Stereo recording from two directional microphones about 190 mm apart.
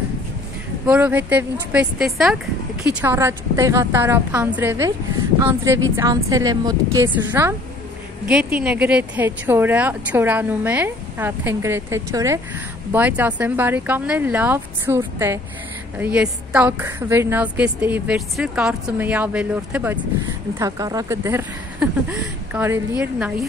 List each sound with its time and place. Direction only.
0.8 s speech: 5° right (ahead or behind)